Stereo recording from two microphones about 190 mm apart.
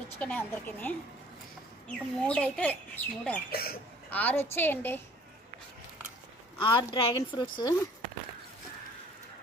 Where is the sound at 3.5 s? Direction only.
55° left (ahead or behind).